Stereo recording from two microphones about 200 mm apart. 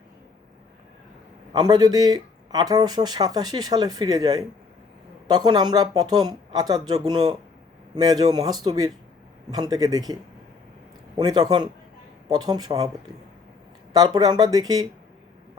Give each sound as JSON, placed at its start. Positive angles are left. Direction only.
{"t": 1.5, "sound": "speech", "side_deg": -20}
{"t": 11.2, "sound": "speech", "side_deg": -20}
{"t": 13.9, "sound": "speech", "side_deg": -20}